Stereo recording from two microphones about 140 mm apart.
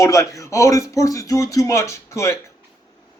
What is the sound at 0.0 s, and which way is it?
Speech, 25° left (ahead or behind).